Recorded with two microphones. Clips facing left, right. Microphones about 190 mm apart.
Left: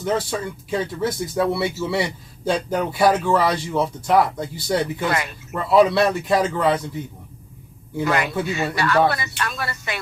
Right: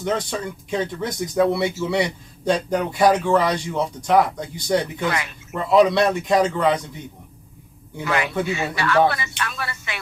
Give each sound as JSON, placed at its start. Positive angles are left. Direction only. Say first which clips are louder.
{"t": 0.0, "sound": "speech", "louder": "left 1 dB", "side_deg": 5}
{"t": 8.0, "sound": "speech", "louder": "left 1 dB", "side_deg": 40}